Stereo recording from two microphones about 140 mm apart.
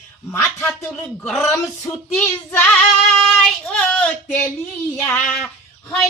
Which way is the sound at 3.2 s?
5° left (ahead or behind).